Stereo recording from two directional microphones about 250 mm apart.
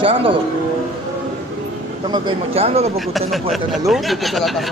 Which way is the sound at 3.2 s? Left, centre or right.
Centre.